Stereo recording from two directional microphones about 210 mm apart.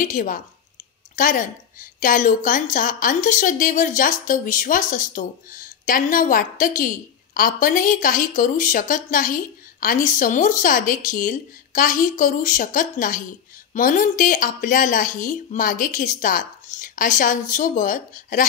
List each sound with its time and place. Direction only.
0.0 s a woman's voice: 40° left (ahead or behind)